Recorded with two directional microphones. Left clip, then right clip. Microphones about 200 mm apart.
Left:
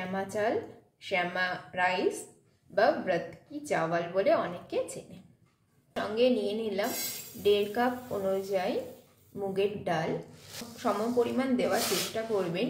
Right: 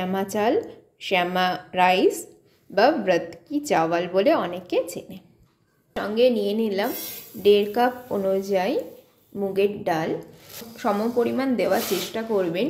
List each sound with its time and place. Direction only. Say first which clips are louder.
0.1 s a woman's voice: right 7 dB; 45° right (ahead or behind)